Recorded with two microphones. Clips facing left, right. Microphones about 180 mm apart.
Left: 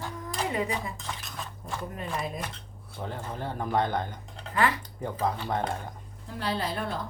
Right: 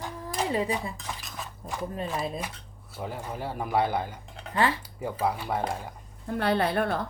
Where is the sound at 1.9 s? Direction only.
30° right (ahead or behind).